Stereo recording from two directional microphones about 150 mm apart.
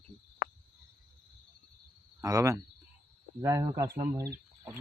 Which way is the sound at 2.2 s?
20° right (ahead or behind).